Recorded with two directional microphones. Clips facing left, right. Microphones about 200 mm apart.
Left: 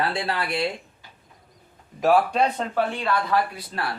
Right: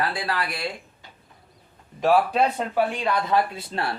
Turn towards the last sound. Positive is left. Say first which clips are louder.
# right 2 dB
turn(degrees=-25)  # may be behind; listen again after turning